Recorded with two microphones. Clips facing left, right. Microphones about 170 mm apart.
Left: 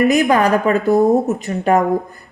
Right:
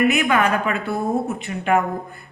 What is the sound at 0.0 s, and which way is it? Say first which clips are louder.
Speech: left 5 dB; 35° left (ahead or behind).